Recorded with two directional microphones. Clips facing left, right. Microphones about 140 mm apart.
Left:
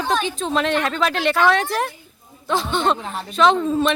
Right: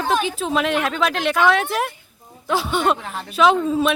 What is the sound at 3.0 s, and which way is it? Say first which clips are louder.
Speech: left 1 dB; 15° left (ahead or behind).